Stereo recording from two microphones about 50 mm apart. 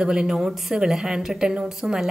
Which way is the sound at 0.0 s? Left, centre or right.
Centre.